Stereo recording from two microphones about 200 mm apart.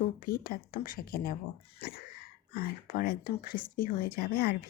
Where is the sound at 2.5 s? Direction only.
50° left (ahead or behind).